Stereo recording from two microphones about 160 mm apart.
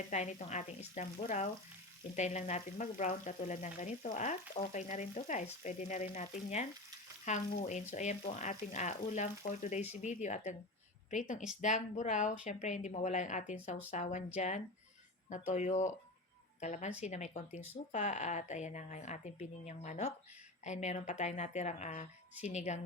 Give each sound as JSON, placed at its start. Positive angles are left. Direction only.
{"t": 0.1, "sound": "frying", "side_deg": 45}